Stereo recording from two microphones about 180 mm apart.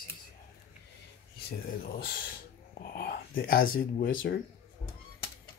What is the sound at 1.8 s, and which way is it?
Speech, 55° left (ahead or behind).